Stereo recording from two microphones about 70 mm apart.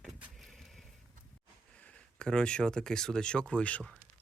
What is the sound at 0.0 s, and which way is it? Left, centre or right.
Vehicle, centre.